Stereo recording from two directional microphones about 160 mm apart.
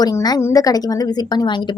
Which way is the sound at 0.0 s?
25° left (ahead or behind).